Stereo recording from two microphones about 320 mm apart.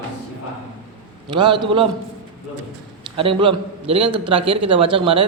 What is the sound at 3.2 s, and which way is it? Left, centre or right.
A man's voice, centre.